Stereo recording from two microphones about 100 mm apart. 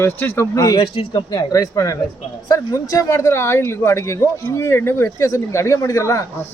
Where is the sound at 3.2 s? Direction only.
25° left (ahead or behind).